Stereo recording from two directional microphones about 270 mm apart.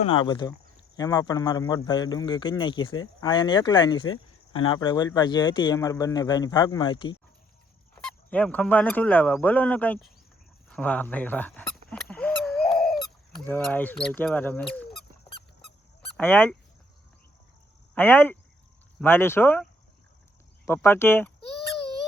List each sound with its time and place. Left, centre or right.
0.0 s speech: centre
7.9 s speech: centre
10.7 s a sound: centre
13.7 s speech: centre
16.1 s speech: centre
17.9 s speech: centre
20.7 s speech: centre